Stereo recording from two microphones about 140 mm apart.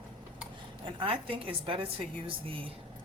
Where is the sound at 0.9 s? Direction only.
40° right (ahead or behind).